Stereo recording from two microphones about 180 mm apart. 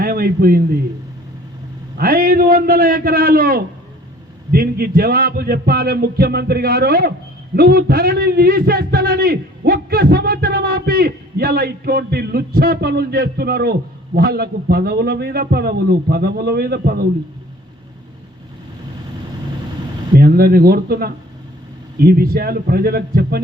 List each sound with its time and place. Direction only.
0.0 s a man's voice: 55° right (ahead or behind)
2.0 s a man's voice: 55° right (ahead or behind)
20.1 s a man's voice: 60° right (ahead or behind)